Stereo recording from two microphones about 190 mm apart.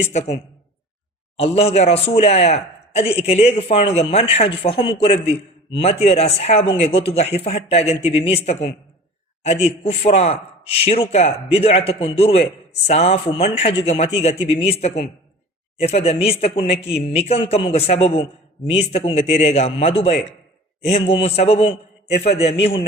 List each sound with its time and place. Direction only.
0.1 s speech: 35° left (ahead or behind)